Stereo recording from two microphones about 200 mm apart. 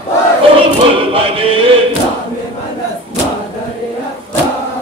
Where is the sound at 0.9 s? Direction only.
25° right (ahead or behind).